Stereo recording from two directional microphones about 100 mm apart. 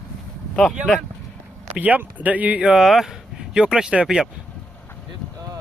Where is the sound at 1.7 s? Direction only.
15° right (ahead or behind).